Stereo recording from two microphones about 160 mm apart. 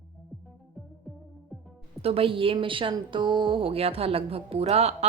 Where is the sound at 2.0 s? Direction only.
35° right (ahead or behind).